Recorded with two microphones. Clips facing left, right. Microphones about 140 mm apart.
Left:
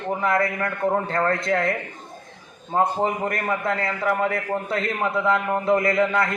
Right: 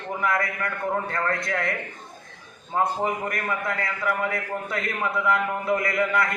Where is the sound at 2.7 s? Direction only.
25° left (ahead or behind).